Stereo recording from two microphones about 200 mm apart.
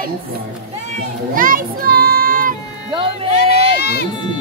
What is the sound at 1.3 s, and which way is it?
Child singing, 45° right (ahead or behind).